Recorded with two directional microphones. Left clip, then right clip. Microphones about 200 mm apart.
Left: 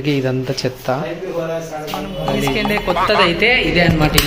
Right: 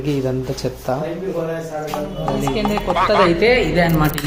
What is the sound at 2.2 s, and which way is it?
Speech, 5° right (ahead or behind).